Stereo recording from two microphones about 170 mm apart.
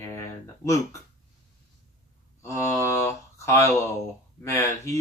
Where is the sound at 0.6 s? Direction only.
20° left (ahead or behind).